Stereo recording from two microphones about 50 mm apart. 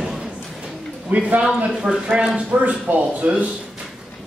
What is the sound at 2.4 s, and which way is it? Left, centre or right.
Speech, right.